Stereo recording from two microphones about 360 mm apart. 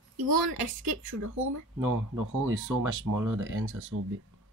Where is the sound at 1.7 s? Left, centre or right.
Right.